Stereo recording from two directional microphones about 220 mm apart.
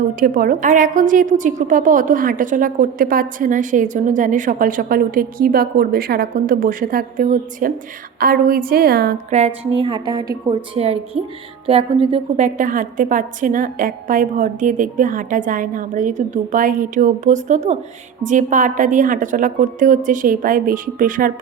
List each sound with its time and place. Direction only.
0.2 s a woman's voice: 40° right (ahead or behind)
9.7 s a woman's voice: 20° right (ahead or behind); by 21.3 s 40° right (ahead or behind)